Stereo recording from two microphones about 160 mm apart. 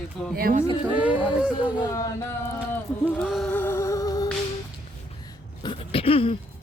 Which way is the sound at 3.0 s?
Centre (ahead or behind).